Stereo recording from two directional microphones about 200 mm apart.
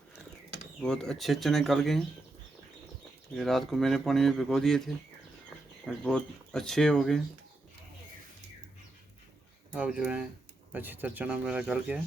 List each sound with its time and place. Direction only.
0.8 s speech: 5° left (ahead or behind)
3.3 s speech: centre (ahead or behind)
9.7 s speech: 5° right (ahead or behind)